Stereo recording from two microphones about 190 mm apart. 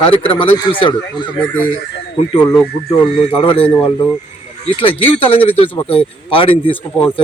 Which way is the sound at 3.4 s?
30° left (ahead or behind).